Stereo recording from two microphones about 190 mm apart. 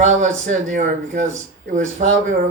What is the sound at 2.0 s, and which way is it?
Speech, 40° right (ahead or behind).